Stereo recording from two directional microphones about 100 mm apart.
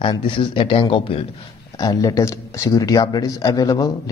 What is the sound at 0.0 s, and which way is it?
Speech, 55° left (ahead or behind).